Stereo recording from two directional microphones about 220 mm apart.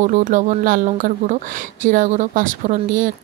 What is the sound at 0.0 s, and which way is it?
Speech, 35° right (ahead or behind).